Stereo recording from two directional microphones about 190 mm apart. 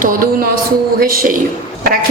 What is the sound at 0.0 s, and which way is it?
A woman's voice, 45° right (ahead or behind).